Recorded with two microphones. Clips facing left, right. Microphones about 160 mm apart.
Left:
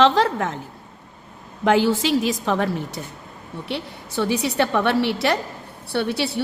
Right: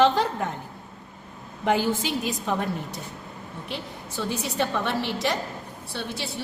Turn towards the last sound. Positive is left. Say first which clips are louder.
# left 10 dB
turn(degrees=70)  # may be behind; listen again after turning